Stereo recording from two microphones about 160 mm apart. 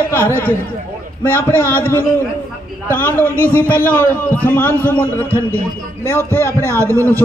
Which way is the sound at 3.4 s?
10° left (ahead or behind).